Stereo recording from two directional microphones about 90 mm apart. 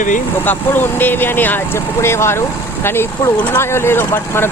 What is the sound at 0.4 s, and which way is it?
Speech, 20° left (ahead or behind).